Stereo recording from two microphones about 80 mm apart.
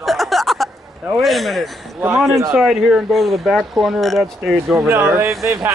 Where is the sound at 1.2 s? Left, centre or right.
Centre.